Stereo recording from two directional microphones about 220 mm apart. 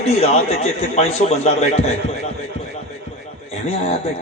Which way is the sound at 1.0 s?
30° left (ahead or behind).